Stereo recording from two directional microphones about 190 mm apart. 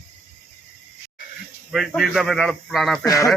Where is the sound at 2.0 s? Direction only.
Centre (ahead or behind).